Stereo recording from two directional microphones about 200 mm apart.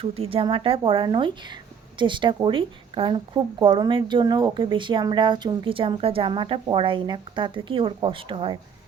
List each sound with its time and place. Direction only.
0.0 s a woman's voice: 30° right (ahead or behind)